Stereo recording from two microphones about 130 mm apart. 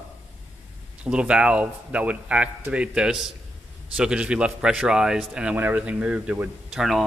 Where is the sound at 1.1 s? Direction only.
10° right (ahead or behind).